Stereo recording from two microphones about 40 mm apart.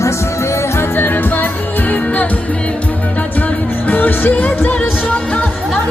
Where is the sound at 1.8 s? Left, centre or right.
Left.